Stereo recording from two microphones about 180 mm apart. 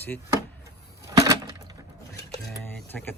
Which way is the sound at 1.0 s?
20° right (ahead or behind).